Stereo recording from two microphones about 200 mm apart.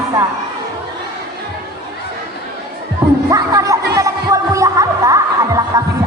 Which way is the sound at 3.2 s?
15° right (ahead or behind).